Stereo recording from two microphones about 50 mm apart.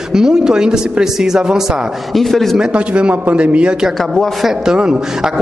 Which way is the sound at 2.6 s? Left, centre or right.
Right.